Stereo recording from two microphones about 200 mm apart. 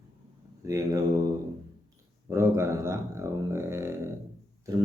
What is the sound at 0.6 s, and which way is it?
Speech, 15° right (ahead or behind).